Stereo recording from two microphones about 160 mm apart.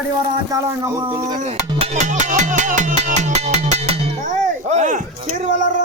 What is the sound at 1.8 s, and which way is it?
Music, 50° right (ahead or behind).